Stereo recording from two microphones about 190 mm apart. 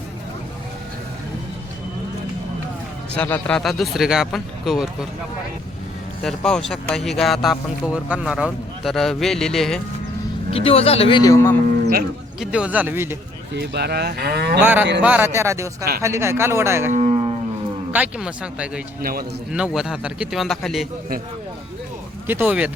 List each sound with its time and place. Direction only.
3.2 s speech: 10° left (ahead or behind)
6.2 s speech: centre (ahead or behind)
10.5 s a man's voice: 30° left (ahead or behind)
11.6 s speech: 55° right (ahead or behind)
12.4 s speech: 5° right (ahead or behind)
13.6 s cattle: 60° right (ahead or behind)
14.6 s speech: 10° right (ahead or behind)
16.9 s a sound: 35° right (ahead or behind)
17.9 s speech: 5° right (ahead or behind)
22.3 s speech: 10° right (ahead or behind)